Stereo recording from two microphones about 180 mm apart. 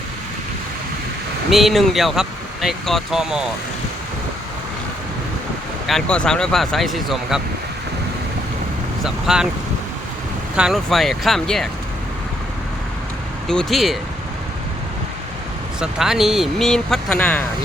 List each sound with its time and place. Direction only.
1.5 s speech: centre (ahead or behind)
5.8 s speech: 5° left (ahead or behind)
9.0 s speech: 5° right (ahead or behind)
10.6 s speech: centre (ahead or behind)
13.5 s speech: centre (ahead or behind)
15.8 s speech: centre (ahead or behind)